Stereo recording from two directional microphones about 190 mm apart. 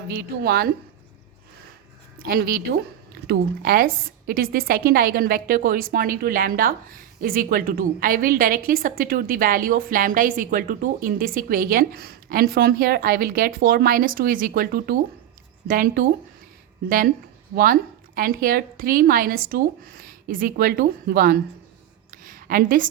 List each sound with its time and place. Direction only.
0.1 s a woman's voice: 55° right (ahead or behind)
2.2 s a woman's voice: 50° right (ahead or behind)
17.5 s a woman's voice: 50° right (ahead or behind)
22.1 s a sound: 45° right (ahead or behind)